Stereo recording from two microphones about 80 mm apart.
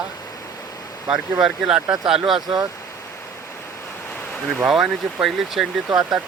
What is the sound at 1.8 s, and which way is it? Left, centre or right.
Speech, right.